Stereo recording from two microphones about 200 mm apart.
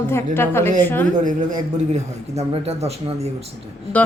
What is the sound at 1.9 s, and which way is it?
Speech, 30° right (ahead or behind).